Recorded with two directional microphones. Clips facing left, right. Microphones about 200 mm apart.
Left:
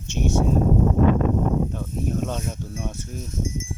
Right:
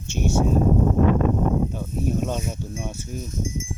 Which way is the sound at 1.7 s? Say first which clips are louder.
Right 1 dB; 5° right (ahead or behind).